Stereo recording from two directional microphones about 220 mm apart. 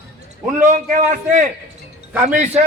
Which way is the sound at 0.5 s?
35° right (ahead or behind).